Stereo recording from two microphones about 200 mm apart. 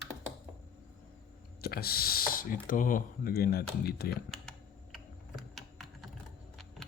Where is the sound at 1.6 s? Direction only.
50° left (ahead or behind).